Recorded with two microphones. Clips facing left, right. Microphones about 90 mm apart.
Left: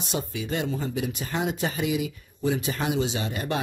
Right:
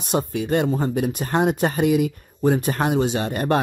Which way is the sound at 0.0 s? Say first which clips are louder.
Right 7 dB; 55° right (ahead or behind).